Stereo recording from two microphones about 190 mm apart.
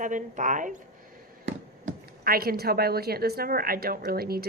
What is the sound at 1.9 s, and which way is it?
A woman's voice, 50° right (ahead or behind).